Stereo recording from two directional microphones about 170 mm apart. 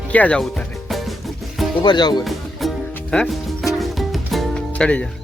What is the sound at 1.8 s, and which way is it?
Speech, 25° left (ahead or behind).